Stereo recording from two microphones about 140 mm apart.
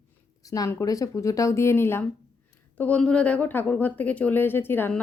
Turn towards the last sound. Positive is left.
turn(degrees=15)  # may be behind; listen again after turning